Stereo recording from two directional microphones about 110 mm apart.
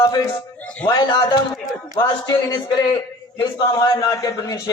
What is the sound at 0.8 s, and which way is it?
A man's voice, 45° left (ahead or behind).